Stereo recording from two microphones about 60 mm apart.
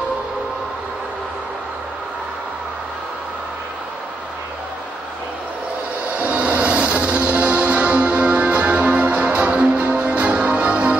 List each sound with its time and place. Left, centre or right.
6.1 s music: right